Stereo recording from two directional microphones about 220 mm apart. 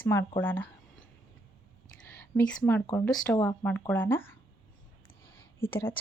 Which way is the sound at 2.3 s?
10° left (ahead or behind).